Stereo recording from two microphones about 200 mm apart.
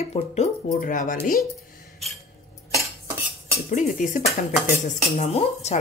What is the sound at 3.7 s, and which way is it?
Speech, 40° left (ahead or behind).